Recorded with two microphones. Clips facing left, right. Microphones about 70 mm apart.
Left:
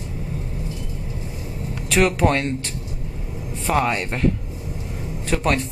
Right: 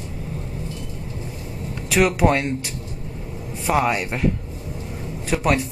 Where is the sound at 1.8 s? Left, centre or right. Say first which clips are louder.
Right 1 dB; centre.